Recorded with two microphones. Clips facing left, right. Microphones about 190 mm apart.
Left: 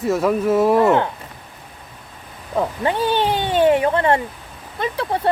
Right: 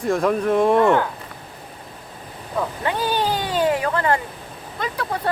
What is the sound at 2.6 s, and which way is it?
Speech, 30° left (ahead or behind).